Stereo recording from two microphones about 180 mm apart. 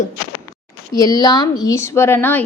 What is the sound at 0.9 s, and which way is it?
A woman's voice, 20° left (ahead or behind).